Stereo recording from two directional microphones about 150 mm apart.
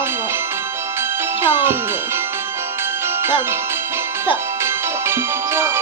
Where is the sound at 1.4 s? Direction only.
15° right (ahead or behind).